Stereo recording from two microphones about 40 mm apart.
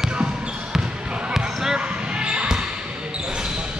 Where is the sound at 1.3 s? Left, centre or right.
Centre.